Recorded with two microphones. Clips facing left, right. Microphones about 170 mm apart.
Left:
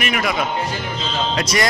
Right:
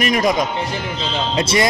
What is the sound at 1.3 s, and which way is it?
Speech, 25° right (ahead or behind).